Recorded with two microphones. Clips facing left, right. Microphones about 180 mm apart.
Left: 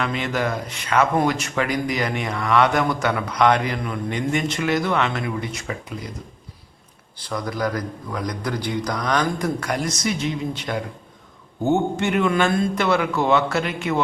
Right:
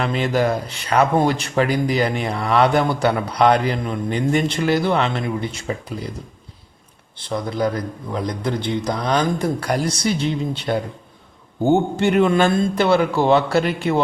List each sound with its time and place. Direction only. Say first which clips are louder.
0.0 s a man's voice: right 4 dB; 35° right (ahead or behind)
7.2 s a man's voice: right 3 dB; 25° right (ahead or behind)